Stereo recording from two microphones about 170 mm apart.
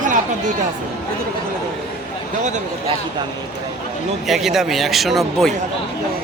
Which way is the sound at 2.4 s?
45° right (ahead or behind).